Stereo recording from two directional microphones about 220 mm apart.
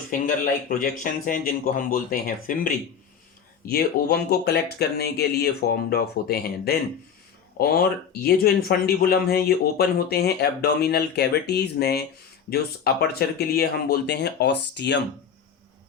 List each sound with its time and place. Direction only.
0.1 s speech: 40° left (ahead or behind)